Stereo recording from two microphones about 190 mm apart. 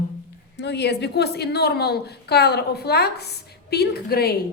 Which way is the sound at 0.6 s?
65° left (ahead or behind).